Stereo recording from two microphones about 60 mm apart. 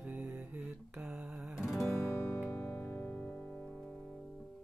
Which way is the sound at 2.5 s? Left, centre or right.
Left.